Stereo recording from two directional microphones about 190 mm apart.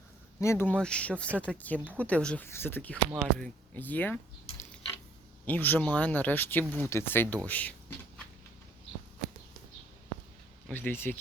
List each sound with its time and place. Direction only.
0.3 s speech: 15° left (ahead or behind)
3.1 s speech: centre (ahead or behind)
5.5 s speech: 10° left (ahead or behind)
10.7 s speech: 10° left (ahead or behind)